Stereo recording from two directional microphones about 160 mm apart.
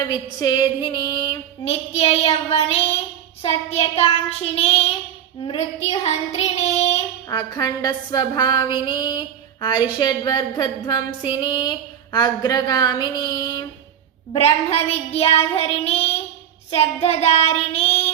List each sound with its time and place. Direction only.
0.3 s a woman's voice: 25° left (ahead or behind)
1.6 s child singing: 40° left (ahead or behind)
7.3 s a woman's voice: 25° left (ahead or behind)
14.3 s child singing: 40° left (ahead or behind)